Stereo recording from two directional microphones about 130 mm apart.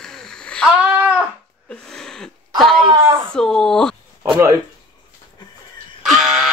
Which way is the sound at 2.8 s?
40° right (ahead or behind).